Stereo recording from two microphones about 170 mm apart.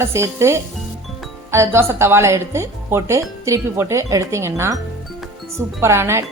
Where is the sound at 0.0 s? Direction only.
15° right (ahead or behind).